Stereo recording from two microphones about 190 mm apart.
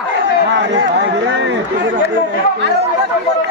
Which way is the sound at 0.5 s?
70° right (ahead or behind).